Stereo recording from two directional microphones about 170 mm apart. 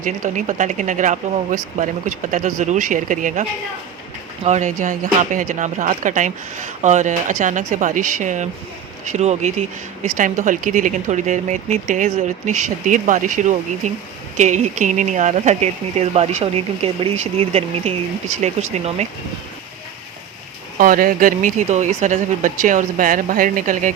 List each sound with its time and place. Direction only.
0.0 s speech: 50° right (ahead or behind)
4.4 s speech: 45° right (ahead or behind)
20.7 s speech: 55° right (ahead or behind)